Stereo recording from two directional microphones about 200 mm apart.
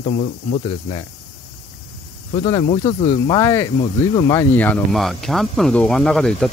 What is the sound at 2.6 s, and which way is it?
Speech, 35° left (ahead or behind).